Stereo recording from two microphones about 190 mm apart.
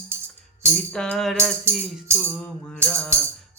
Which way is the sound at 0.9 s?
5° left (ahead or behind).